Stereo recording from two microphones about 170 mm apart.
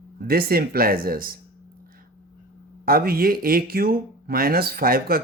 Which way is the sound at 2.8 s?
60° right (ahead or behind).